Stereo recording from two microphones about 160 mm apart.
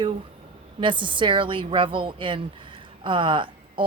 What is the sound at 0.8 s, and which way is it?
A woman's voice, 30° right (ahead or behind).